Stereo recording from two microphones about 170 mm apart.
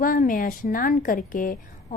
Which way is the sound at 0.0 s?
55° left (ahead or behind).